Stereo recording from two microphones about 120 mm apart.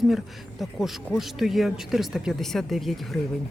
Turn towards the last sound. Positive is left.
turn(degrees=0)  # may be behind; listen again after turning